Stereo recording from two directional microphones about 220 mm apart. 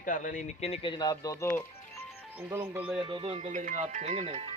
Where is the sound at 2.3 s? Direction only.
10° right (ahead or behind).